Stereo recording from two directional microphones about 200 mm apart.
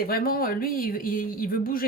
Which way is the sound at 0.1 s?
50° left (ahead or behind).